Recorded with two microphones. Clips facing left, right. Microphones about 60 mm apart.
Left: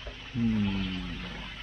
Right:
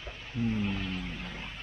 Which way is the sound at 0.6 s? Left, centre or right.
Centre.